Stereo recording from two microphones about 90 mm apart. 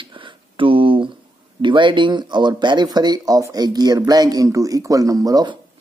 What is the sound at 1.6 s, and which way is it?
Speech, 65° right (ahead or behind).